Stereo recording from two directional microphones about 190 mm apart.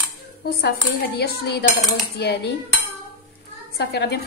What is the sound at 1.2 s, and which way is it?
A woman's voice, 60° left (ahead or behind).